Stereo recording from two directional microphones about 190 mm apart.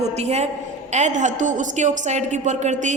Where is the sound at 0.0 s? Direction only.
35° right (ahead or behind).